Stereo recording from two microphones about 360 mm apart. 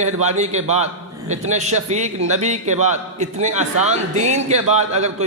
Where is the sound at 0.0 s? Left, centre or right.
Centre.